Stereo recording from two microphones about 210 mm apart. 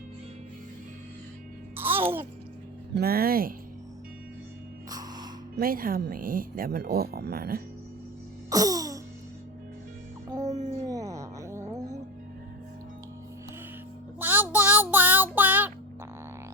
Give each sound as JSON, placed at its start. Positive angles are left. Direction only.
{"t": 1.7, "sound": "music", "side_deg": -10}
{"t": 2.9, "sound": "speech", "side_deg": -45}
{"t": 4.9, "sound": "music", "side_deg": -20}
{"t": 5.5, "sound": "speech", "side_deg": -45}
{"t": 8.4, "sound": "music", "side_deg": -15}
{"t": 10.4, "sound": "music", "side_deg": -35}
{"t": 10.8, "sound": "a sound", "side_deg": -15}
{"t": 14.2, "sound": "child singing", "side_deg": -10}